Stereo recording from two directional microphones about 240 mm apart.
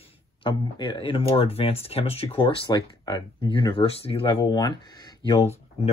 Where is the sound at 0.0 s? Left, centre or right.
Left.